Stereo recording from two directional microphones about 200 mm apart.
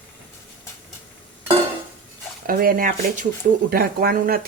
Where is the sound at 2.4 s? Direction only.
45° right (ahead or behind).